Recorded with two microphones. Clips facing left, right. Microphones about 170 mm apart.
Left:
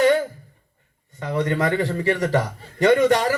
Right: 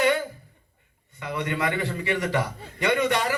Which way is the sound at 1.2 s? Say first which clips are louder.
Left 6 dB; 40° left (ahead or behind).